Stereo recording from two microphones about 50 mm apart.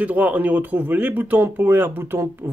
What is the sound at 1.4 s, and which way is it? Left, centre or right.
Speech, right.